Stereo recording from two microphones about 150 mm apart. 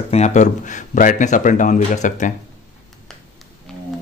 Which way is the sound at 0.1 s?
50° left (ahead or behind).